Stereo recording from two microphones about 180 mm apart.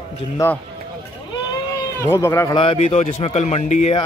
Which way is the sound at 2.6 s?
30° left (ahead or behind).